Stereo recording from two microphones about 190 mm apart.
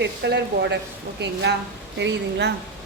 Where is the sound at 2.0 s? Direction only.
65° right (ahead or behind).